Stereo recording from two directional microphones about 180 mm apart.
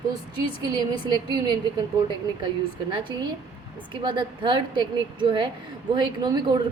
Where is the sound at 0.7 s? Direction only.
25° right (ahead or behind).